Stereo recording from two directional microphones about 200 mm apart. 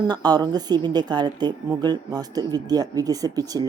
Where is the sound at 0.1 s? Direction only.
20° right (ahead or behind).